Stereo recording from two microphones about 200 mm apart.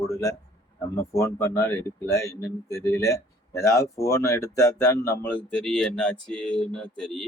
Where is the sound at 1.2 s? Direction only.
15° left (ahead or behind).